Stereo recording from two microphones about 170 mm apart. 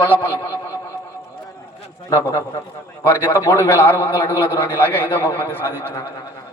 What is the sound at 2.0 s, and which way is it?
A man's voice, 20° left (ahead or behind).